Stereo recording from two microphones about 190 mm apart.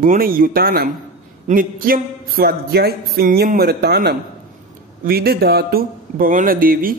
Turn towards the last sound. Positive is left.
turn(degrees=-50)  # may be behind; listen again after turning